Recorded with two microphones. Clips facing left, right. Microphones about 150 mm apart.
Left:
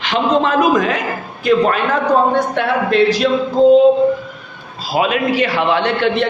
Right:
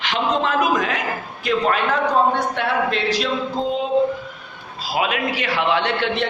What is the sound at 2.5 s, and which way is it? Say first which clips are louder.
Speech: left 7 dB; 50° left (ahead or behind).